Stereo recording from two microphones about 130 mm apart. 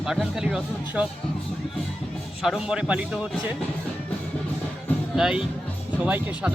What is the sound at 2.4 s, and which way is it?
Speech, 5° right (ahead or behind).